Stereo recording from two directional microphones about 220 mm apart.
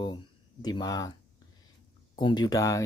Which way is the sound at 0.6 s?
20° left (ahead or behind).